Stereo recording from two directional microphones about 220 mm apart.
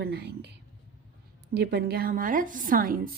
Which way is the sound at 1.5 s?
50° right (ahead or behind).